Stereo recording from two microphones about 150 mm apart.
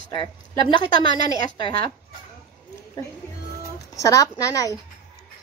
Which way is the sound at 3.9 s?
25° left (ahead or behind).